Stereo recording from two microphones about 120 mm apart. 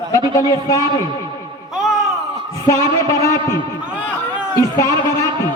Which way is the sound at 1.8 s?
5° right (ahead or behind).